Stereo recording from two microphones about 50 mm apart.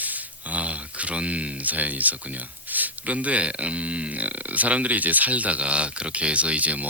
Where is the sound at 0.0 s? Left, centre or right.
Right.